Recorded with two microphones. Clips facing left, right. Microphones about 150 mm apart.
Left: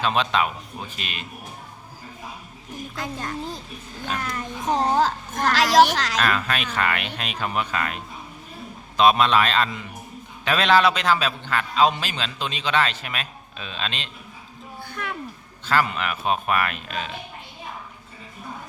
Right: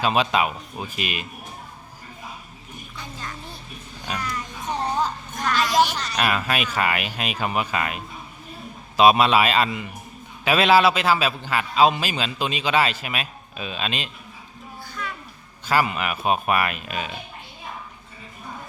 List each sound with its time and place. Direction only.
0.0 s a man's voice: 10° right (ahead or behind)
3.0 s speech: 90° left
4.2 s speech: 50° left (ahead or behind)
4.6 s a sound: 90° left
5.5 s speech: 90° left
6.2 s a man's voice: 10° right (ahead or behind)
14.8 s a sound: 55° left (ahead or behind)
15.6 s a man's voice: 10° right (ahead or behind)